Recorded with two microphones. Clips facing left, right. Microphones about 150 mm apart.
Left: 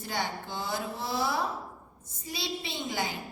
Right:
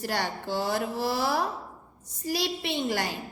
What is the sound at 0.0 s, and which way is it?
A woman's voice, 70° right (ahead or behind).